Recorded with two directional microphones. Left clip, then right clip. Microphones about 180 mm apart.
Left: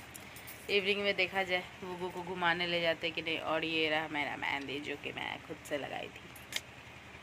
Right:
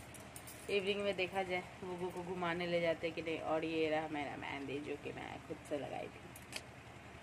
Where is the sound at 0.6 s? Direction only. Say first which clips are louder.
Left 5 dB; centre (ahead or behind).